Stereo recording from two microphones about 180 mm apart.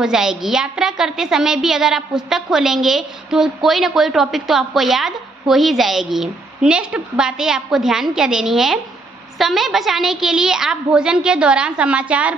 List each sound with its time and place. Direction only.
0.0 s a woman's voice: 5° right (ahead or behind)